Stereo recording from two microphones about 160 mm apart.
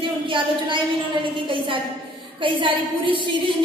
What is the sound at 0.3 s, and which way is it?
A woman's voice, 30° right (ahead or behind).